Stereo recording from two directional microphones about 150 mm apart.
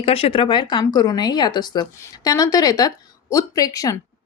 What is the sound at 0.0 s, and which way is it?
Speech, 40° left (ahead or behind).